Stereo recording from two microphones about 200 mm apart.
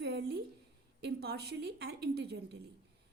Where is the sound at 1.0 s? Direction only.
55° right (ahead or behind).